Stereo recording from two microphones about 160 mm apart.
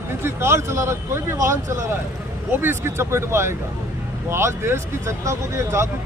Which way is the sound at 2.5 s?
15° right (ahead or behind).